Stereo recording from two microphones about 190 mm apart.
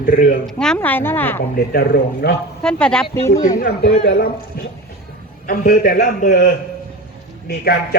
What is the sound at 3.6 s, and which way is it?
Speech, 55° left (ahead or behind).